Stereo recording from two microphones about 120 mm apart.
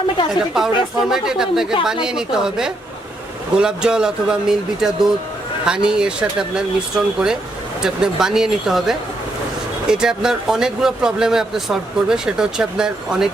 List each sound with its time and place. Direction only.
0.3 s speech: 5° right (ahead or behind)